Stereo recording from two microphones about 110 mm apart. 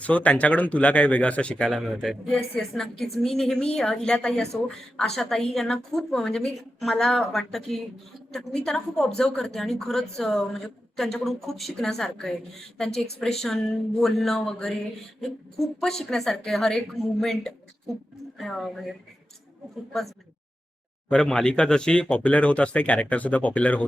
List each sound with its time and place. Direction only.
0.0 s a woman's voice: 10° left (ahead or behind)
21.1 s speech: 5° left (ahead or behind)